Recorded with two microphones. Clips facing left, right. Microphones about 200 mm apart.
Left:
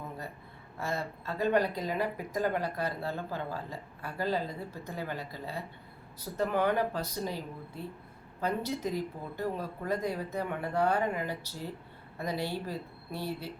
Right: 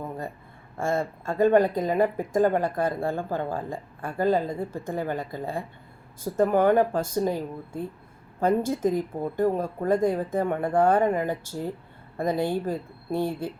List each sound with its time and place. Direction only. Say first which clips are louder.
0.8 s speech: right 8 dB; 50° right (ahead or behind)